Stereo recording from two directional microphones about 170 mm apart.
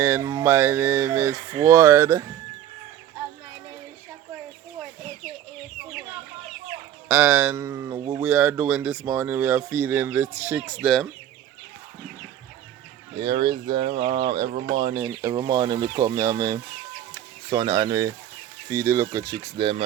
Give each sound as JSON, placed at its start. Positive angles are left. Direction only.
{"t": 0.0, "sound": "speech", "side_deg": -15}
{"t": 7.1, "sound": "speech", "side_deg": -10}
{"t": 13.2, "sound": "speech", "side_deg": -30}
{"t": 13.9, "sound": "speech", "side_deg": -45}
{"t": 15.2, "sound": "speech", "side_deg": -25}